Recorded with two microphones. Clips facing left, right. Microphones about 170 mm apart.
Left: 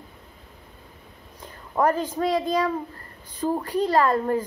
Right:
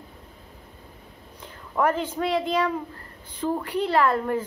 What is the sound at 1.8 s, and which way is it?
A woman's voice, 10° left (ahead or behind).